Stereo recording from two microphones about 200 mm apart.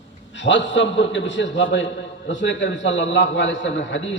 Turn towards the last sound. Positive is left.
turn(degrees=70)  # may be behind; listen again after turning